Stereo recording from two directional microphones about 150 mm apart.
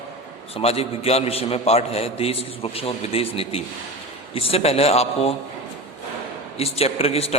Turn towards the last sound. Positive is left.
turn(degrees=40)  # may be behind; listen again after turning